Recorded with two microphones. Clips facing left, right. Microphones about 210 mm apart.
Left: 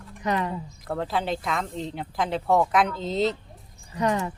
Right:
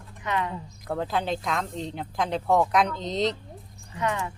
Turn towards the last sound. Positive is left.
turn(degrees=35)  # may be behind; listen again after turning